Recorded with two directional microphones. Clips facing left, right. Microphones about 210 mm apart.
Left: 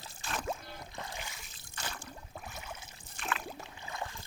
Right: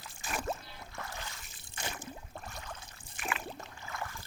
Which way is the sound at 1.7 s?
20° right (ahead or behind).